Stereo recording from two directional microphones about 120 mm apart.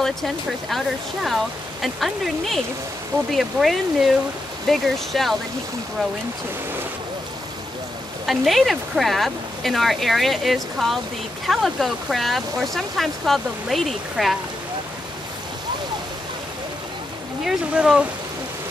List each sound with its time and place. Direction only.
0.0 s speech: centre (ahead or behind)
8.3 s speech: centre (ahead or behind)
17.5 s speech: 5° right (ahead or behind)